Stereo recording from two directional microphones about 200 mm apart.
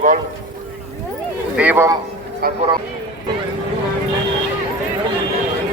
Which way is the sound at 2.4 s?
45° right (ahead or behind).